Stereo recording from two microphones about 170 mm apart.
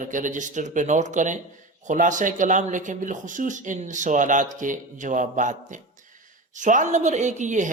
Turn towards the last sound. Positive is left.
turn(degrees=-45)  # may be behind; listen again after turning